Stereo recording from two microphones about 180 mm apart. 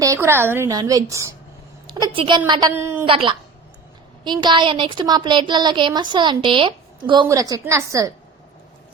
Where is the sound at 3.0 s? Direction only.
30° right (ahead or behind).